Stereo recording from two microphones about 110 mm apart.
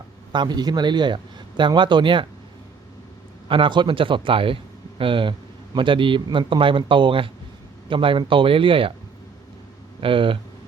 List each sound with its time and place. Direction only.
0.3 s a man's voice: 40° right (ahead or behind)
3.5 s a man's voice: 45° right (ahead or behind)
10.0 s a man's voice: 50° right (ahead or behind)